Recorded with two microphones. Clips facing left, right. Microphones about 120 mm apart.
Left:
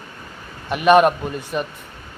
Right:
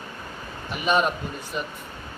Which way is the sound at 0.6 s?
65° left (ahead or behind).